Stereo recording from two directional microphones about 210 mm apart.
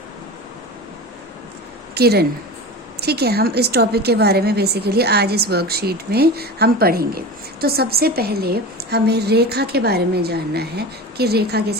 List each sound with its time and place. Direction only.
2.0 s a woman's voice: 50° right (ahead or behind)